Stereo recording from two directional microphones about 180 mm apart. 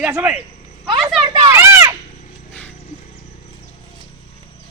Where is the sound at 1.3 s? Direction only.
20° right (ahead or behind).